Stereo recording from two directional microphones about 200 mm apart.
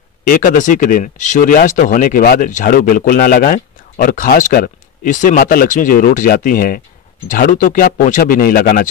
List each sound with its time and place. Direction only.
0.2 s speech: 40° left (ahead or behind)